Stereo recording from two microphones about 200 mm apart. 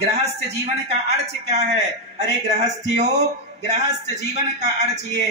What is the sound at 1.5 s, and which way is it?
Speech, 35° right (ahead or behind).